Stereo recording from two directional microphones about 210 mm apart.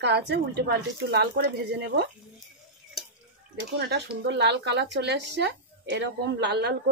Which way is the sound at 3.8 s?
50° right (ahead or behind).